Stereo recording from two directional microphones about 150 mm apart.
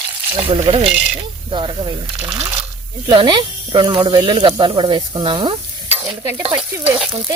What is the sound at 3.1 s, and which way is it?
Speech, 30° right (ahead or behind).